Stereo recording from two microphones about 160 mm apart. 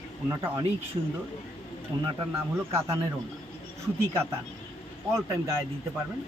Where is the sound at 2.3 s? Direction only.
15° right (ahead or behind).